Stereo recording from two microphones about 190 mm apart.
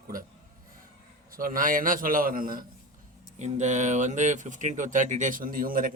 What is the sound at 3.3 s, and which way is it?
Speech, 35° right (ahead or behind).